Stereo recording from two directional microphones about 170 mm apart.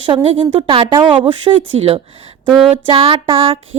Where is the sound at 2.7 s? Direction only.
35° right (ahead or behind).